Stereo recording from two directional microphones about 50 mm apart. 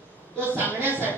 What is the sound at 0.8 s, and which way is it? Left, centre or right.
Speech, right.